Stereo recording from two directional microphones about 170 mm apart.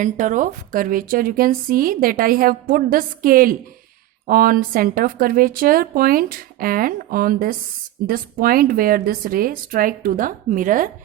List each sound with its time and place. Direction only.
0.0 s speech: 50° right (ahead or behind)